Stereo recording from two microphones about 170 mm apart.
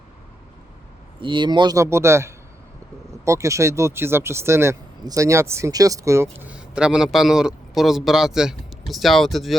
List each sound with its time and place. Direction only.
1.2 s speech: 25° right (ahead or behind)
6.3 s a man's voice: 5° right (ahead or behind)